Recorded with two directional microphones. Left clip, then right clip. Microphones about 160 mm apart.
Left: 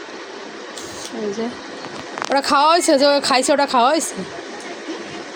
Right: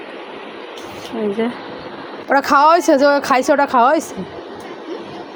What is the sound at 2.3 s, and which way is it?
Speech, 20° right (ahead or behind).